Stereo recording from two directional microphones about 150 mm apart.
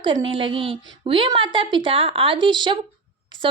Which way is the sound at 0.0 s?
35° right (ahead or behind).